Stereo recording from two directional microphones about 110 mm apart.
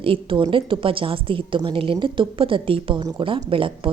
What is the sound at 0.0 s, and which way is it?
A woman's voice, 50° right (ahead or behind).